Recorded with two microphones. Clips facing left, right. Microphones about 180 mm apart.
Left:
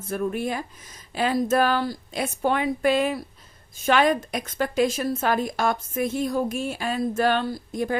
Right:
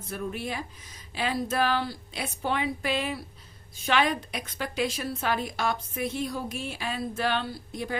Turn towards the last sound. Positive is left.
turn(degrees=45)  # may be behind; listen again after turning